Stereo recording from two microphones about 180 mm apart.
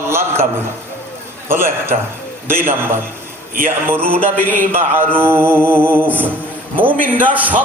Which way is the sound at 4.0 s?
30° right (ahead or behind).